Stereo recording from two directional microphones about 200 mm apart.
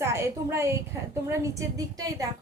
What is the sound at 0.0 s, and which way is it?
A woman's voice, 15° right (ahead or behind).